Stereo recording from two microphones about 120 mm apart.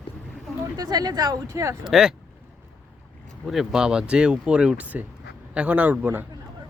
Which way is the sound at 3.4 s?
Centre (ahead or behind).